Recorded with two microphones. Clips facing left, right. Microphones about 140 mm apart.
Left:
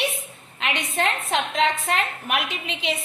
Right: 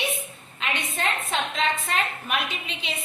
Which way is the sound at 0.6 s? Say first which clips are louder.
Left 4 dB; 75° left (ahead or behind).